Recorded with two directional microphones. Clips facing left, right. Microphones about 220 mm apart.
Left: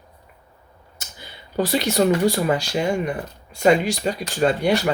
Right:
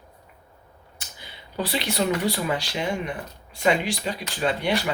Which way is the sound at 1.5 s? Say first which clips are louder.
Left 6 dB; 45° left (ahead or behind).